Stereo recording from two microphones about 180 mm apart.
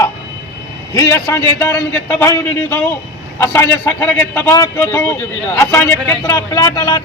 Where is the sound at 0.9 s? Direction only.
15° left (ahead or behind).